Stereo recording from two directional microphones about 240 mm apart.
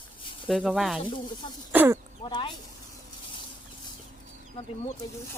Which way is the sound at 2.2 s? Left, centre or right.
Centre.